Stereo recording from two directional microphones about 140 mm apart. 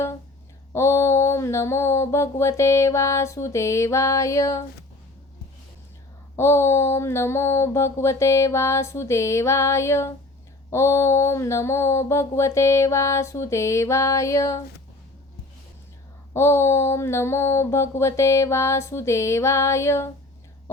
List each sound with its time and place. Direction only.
0.7 s mantra: 20° left (ahead or behind)
6.3 s mantra: 20° left (ahead or behind)
16.3 s mantra: 20° left (ahead or behind)